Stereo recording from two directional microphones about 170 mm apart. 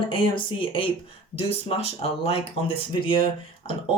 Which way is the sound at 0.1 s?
30° left (ahead or behind).